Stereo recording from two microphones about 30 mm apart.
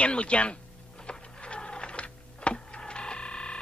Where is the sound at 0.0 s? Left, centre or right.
Left.